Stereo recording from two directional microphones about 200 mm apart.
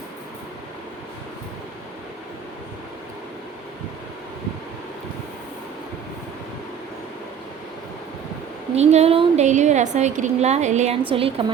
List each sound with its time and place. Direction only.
8.7 s a woman's voice: 35° right (ahead or behind)